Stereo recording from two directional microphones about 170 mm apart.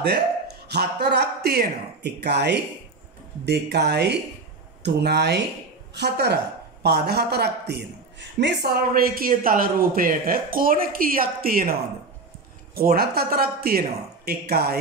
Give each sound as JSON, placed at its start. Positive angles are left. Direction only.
{"t": 0.0, "sound": "speech", "side_deg": -75}
{"t": 12.7, "sound": "speech", "side_deg": -65}